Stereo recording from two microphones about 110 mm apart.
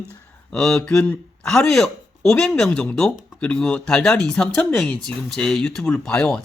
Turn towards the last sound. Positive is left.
turn(degrees=5)  # may be behind; listen again after turning